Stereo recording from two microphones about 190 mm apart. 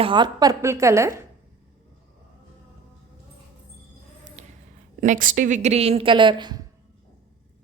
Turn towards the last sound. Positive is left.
turn(degrees=-25)  # may be behind; listen again after turning